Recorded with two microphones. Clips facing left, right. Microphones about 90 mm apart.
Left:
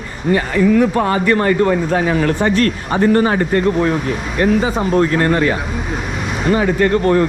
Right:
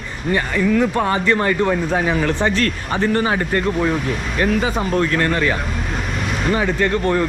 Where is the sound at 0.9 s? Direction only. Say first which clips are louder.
Left 3 dB; 35° left (ahead or behind).